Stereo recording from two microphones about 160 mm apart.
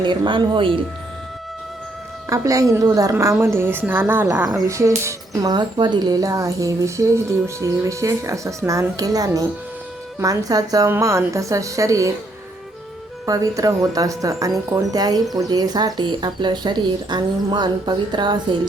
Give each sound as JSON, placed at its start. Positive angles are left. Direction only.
{"t": 0.0, "sound": "speech", "side_deg": -30}
{"t": 2.3, "sound": "a woman's voice", "side_deg": -20}
{"t": 13.2, "sound": "speech", "side_deg": -20}